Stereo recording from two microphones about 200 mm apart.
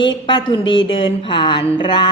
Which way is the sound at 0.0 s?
25° left (ahead or behind).